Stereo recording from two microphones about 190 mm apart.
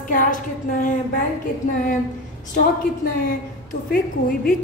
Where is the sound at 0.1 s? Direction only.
45° left (ahead or behind).